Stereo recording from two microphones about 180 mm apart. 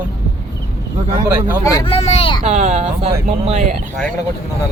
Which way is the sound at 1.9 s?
35° left (ahead or behind).